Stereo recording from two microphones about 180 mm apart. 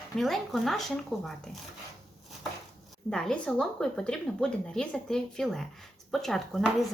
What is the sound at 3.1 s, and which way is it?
Speech, 5° left (ahead or behind).